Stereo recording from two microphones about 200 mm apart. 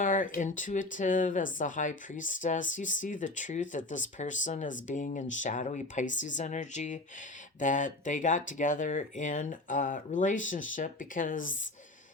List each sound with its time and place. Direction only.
0.0 s speech: 40° left (ahead or behind)